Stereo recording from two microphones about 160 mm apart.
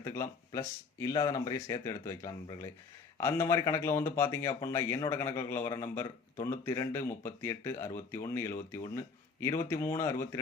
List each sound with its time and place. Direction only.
0.0 s a man's voice: 15° left (ahead or behind)